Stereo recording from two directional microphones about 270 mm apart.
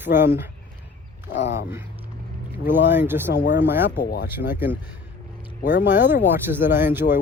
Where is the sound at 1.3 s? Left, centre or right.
Left.